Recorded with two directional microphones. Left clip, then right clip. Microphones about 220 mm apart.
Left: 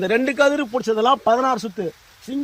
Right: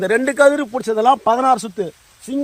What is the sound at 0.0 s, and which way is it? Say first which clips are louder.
A man's voice: right 4 dB; 20° right (ahead or behind).